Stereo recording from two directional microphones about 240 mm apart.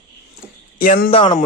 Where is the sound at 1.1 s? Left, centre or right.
Left.